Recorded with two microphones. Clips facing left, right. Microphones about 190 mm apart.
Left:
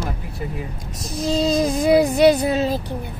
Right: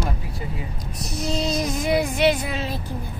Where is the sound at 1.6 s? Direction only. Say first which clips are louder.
Left 6 dB; 35° left (ahead or behind).